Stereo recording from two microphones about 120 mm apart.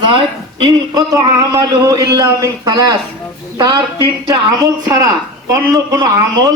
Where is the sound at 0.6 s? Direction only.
30° right (ahead or behind).